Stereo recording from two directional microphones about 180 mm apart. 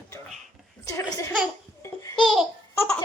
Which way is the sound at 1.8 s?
20° left (ahead or behind).